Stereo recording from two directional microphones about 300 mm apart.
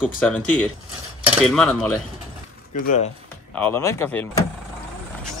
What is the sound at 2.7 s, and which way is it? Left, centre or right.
Speech, left.